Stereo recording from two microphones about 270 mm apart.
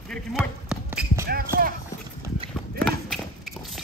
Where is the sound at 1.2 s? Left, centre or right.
Right.